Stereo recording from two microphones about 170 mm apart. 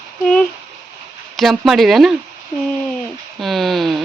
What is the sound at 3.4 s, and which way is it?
Speech, centre (ahead or behind).